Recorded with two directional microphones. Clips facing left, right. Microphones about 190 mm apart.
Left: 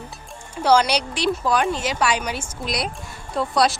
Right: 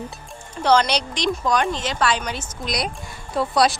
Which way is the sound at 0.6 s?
10° left (ahead or behind).